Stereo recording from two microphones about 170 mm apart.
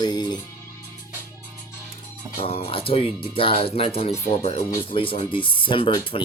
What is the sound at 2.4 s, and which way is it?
Speech, 35° left (ahead or behind).